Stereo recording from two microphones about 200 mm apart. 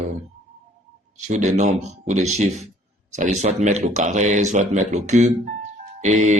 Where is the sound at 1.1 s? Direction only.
35° right (ahead or behind).